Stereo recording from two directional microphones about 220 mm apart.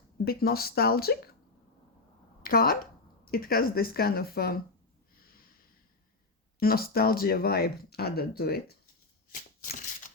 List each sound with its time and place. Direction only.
0.3 s speech: 45° left (ahead or behind)
2.4 s speech: 40° left (ahead or behind)
5.1 s snort: 40° left (ahead or behind)
6.6 s speech: 45° left (ahead or behind)
9.3 s a sound: 35° left (ahead or behind)